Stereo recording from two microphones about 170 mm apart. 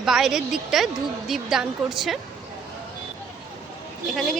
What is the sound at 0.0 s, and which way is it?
A woman's voice, centre (ahead or behind).